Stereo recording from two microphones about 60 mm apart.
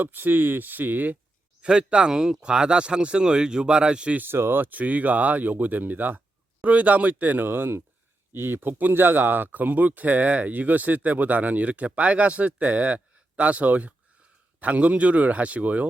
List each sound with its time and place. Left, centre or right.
0.0 s speech: right
1.6 s speech: centre
4.2 s speech: right
7.4 s speech: right